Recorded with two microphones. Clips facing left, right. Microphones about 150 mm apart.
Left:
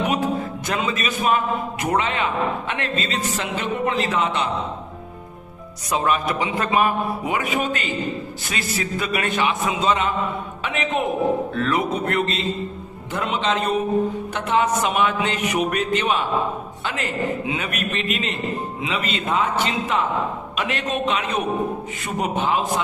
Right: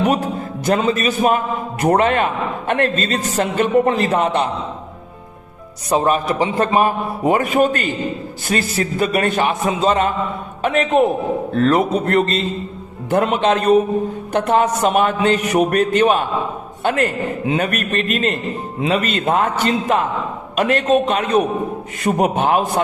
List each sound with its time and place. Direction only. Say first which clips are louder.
0.6 s a man's voice: right 13 dB; 40° right (ahead or behind)
5.9 s a man's voice: right 5 dB; 35° right (ahead or behind)
13.1 s a man's voice: right 8 dB; 55° right (ahead or behind)